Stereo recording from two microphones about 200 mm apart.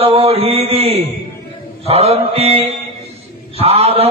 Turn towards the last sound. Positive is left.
turn(degrees=-30)  # may be behind; listen again after turning